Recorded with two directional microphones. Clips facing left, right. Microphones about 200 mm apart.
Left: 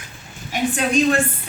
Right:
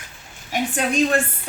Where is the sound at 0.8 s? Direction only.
50° right (ahead or behind).